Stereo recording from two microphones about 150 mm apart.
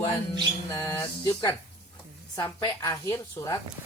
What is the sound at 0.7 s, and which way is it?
Speech, 20° left (ahead or behind).